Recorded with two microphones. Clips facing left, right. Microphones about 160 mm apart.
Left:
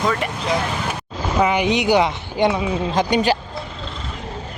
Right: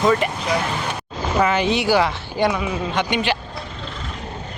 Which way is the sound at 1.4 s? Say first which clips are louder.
Left 1 dB; 15° left (ahead or behind).